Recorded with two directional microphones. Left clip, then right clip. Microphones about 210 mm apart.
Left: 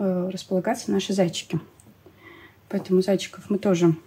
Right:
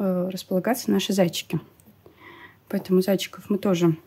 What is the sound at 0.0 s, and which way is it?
Speech, 40° right (ahead or behind).